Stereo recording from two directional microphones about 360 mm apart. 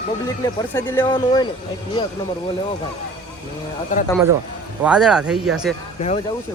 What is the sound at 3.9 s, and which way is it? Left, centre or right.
Speech, left.